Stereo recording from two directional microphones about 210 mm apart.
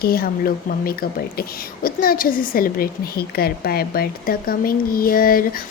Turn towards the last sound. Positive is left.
turn(degrees=45)  # may be behind; listen again after turning